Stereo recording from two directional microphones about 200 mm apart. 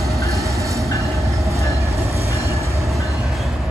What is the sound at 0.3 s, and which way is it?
Train, 15° right (ahead or behind).